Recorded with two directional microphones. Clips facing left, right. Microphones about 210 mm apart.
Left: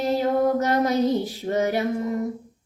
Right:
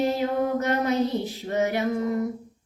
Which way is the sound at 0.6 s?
40° left (ahead or behind).